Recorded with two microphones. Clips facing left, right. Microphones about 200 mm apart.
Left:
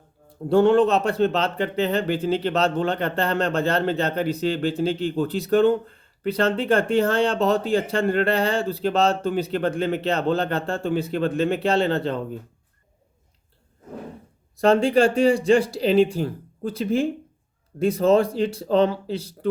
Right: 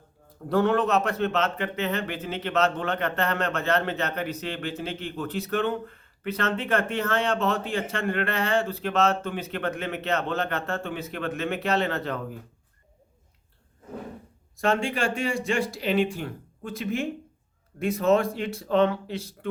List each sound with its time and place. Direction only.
0.4 s a man's voice: 30° left (ahead or behind)
14.6 s a man's voice: 35° left (ahead or behind)